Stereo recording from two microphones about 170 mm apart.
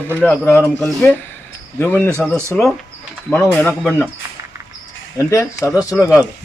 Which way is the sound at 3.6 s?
10° left (ahead or behind).